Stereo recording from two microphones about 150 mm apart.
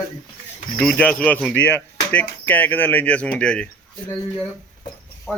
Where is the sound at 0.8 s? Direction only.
5° left (ahead or behind).